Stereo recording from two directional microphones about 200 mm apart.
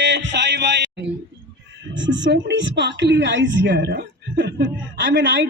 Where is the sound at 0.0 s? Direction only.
60° right (ahead or behind).